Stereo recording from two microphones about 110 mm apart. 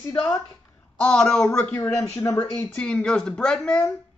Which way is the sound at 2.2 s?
30° left (ahead or behind).